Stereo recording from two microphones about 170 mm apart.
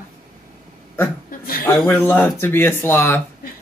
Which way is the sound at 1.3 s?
60° left (ahead or behind).